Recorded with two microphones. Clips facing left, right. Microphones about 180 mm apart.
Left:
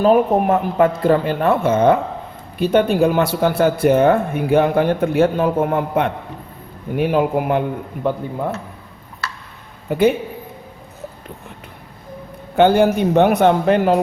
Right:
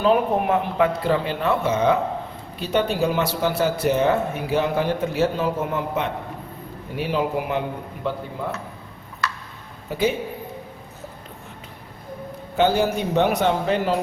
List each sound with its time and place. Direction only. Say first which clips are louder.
0.0 s speech: left 5 dB; 45° left (ahead or behind)
9.9 s speech: left 7 dB; 55° left (ahead or behind)
12.5 s speech: left 6 dB; 55° left (ahead or behind)